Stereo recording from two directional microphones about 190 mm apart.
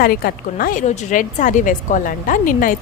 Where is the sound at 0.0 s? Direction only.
50° left (ahead or behind).